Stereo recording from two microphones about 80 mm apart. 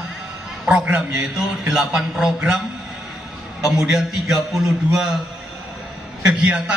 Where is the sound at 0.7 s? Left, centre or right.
Centre.